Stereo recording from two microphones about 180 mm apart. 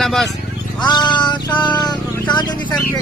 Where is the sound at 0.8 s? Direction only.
25° left (ahead or behind).